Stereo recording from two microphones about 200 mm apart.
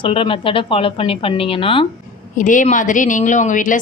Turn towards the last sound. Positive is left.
turn(degrees=40)  # may be behind; listen again after turning